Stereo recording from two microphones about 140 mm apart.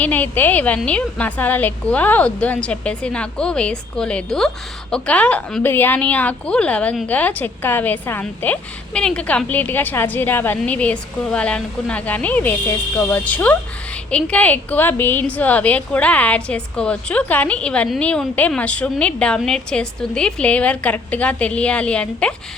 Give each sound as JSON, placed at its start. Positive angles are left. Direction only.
{"t": 0.0, "sound": "a woman's voice", "side_deg": 10}